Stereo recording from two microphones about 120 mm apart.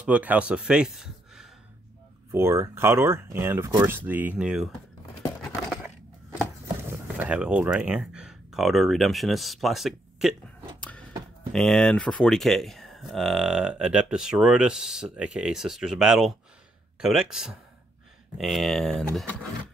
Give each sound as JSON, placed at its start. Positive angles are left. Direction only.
{"t": 0.0, "sound": "speech", "side_deg": -10}
{"t": 2.3, "sound": "speech", "side_deg": -20}
{"t": 7.2, "sound": "speech", "side_deg": -10}
{"t": 10.8, "sound": "a sound", "side_deg": 10}
{"t": 11.5, "sound": "speech", "side_deg": 5}